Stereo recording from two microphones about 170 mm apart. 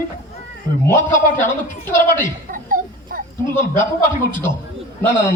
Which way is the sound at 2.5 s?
55° right (ahead or behind).